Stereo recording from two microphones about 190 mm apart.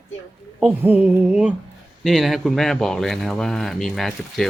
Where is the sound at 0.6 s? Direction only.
10° right (ahead or behind).